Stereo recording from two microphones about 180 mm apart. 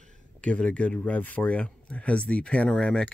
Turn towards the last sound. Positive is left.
turn(degrees=5)  # may be behind; listen again after turning